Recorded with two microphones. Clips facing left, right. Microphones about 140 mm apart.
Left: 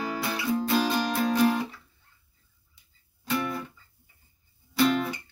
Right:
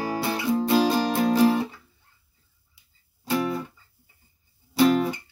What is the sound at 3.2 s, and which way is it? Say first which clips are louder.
Music: right 4 dB; 30° right (ahead or behind).